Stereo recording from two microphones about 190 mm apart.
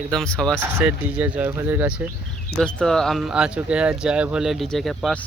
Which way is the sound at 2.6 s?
5° left (ahead or behind).